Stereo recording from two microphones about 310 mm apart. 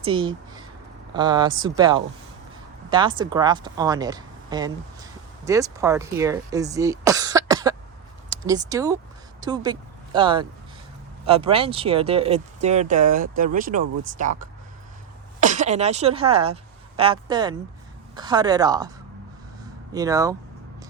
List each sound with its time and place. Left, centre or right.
0.0 s speech: centre
15.4 s speech: right
19.9 s speech: centre